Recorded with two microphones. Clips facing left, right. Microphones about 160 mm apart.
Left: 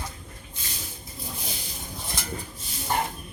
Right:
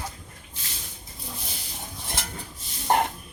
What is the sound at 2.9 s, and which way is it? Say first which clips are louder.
Spray: right 5 dB; 70° right (ahead or behind).